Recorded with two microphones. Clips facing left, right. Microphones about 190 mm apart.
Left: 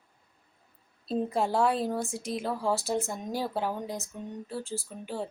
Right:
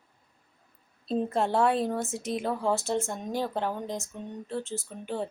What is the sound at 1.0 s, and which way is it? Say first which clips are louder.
A woman's voice: right 1 dB; 5° left (ahead or behind).